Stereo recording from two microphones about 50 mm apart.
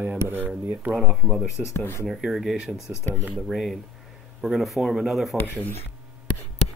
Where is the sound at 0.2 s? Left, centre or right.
Right.